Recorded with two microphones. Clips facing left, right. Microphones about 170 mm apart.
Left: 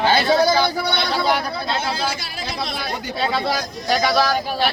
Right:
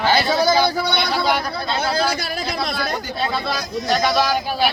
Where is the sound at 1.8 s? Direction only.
40° right (ahead or behind).